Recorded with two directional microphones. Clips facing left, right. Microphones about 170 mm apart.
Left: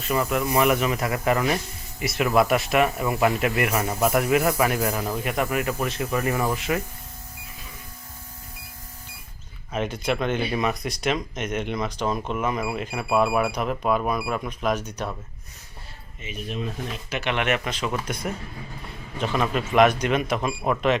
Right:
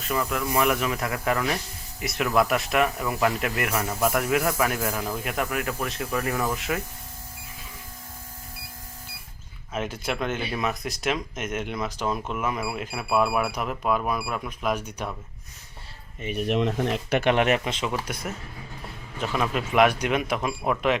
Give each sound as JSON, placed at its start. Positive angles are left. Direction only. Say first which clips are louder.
{"t": 0.1, "sound": "speech", "louder": "left 3 dB", "side_deg": 5}
{"t": 9.7, "sound": "speech", "louder": "left 3 dB", "side_deg": -5}
{"t": 16.2, "sound": "speech", "louder": "right 7 dB", "side_deg": -60}
{"t": 17.3, "sound": "speech", "louder": "right 3 dB", "side_deg": -35}
{"t": 17.9, "sound": "speech", "louder": "left 2 dB", "side_deg": -5}